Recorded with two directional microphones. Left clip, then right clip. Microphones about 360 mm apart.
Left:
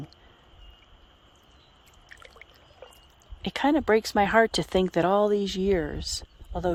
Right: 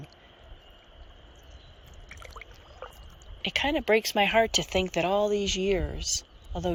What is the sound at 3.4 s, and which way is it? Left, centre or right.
Speech, centre.